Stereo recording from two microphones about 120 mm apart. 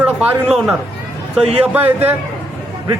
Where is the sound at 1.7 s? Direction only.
15° right (ahead or behind).